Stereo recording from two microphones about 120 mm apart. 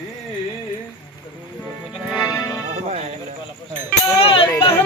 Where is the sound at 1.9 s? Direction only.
5° right (ahead or behind).